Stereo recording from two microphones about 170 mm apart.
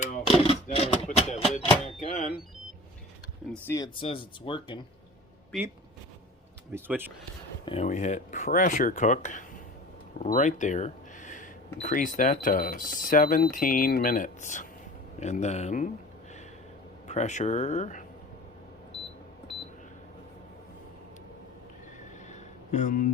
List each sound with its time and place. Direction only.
0.0 s a sound: 45° left (ahead or behind)
0.4 s music: 35° left (ahead or behind)
3.7 s speech: 15° left (ahead or behind)
4.0 s speech: 30° left (ahead or behind)
6.7 s speech: 15° right (ahead or behind)
7.6 s speech: 35° left (ahead or behind)
17.1 s speech: 45° left (ahead or behind)
22.3 s a sound: 45° left (ahead or behind)